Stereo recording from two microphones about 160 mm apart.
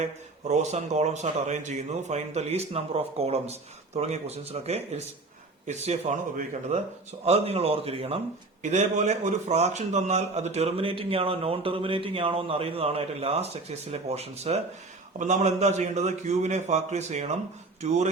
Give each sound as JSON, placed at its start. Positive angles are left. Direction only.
{"t": 0.0, "sound": "a man's voice", "side_deg": -45}